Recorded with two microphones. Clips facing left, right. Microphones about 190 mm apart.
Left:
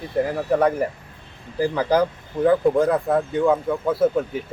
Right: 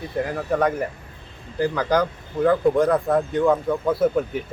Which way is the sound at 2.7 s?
5° left (ahead or behind).